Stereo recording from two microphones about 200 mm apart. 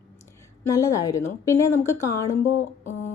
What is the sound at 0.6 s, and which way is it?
A woman's voice, 15° left (ahead or behind).